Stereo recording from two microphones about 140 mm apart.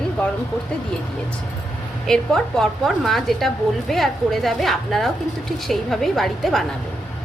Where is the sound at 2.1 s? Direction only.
5° left (ahead or behind).